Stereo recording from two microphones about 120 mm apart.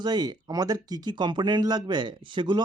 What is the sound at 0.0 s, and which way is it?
Speech, 35° right (ahead or behind).